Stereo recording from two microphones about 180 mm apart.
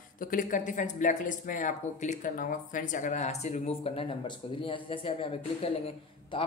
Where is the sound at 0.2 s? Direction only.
50° left (ahead or behind).